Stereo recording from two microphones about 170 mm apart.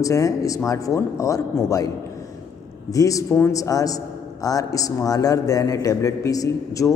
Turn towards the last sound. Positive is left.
turn(degrees=20)  # may be behind; listen again after turning